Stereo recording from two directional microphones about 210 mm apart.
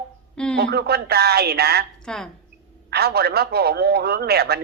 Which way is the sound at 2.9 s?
50° right (ahead or behind).